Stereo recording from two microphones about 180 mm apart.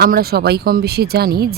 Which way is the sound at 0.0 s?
60° right (ahead or behind).